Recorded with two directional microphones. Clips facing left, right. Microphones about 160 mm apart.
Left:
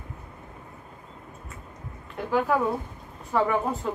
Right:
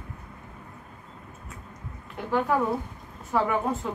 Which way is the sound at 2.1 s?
Centre (ahead or behind).